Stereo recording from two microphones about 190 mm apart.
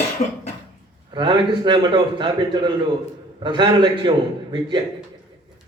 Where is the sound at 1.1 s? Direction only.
25° right (ahead or behind).